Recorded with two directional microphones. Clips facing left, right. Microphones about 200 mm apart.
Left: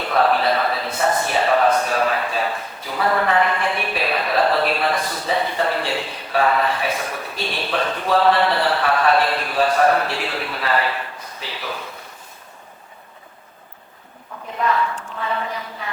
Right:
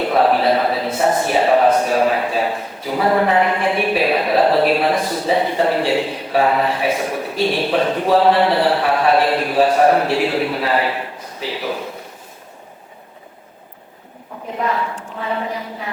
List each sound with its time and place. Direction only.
0.0 s a sound: 10° right (ahead or behind)
1.2 s a man's voice: 10° right (ahead or behind)
14.6 s a woman's voice: 10° right (ahead or behind)